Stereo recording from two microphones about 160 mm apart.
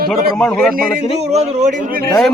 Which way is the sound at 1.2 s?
45° right (ahead or behind).